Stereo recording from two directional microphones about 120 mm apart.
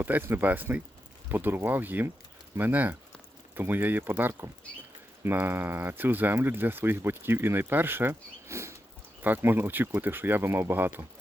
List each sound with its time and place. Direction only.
0.0 s speech: 15° right (ahead or behind)